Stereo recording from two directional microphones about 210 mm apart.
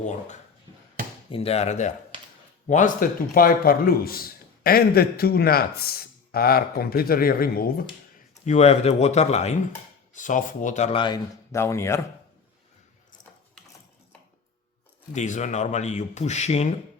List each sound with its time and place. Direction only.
1.3 s a man's voice: 30° left (ahead or behind); by 7.9 s 45° left (ahead or behind)
8.4 s speech: 30° left (ahead or behind); by 11.9 s 15° left (ahead or behind)
15.1 s speech: 35° left (ahead or behind)